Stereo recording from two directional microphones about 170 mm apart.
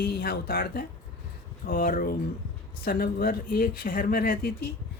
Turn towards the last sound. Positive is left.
turn(degrees=65)  # may be behind; listen again after turning